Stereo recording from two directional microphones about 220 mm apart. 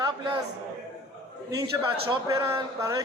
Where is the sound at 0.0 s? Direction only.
15° right (ahead or behind).